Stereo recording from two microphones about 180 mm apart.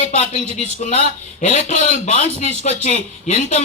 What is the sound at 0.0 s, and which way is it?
A man's voice, 40° left (ahead or behind).